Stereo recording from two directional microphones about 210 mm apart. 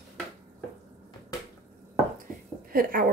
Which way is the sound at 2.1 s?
45° right (ahead or behind).